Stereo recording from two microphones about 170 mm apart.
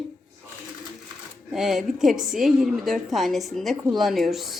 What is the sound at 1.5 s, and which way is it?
A woman's voice, centre (ahead or behind).